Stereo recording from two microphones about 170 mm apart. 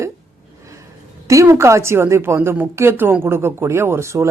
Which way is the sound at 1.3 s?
15° right (ahead or behind).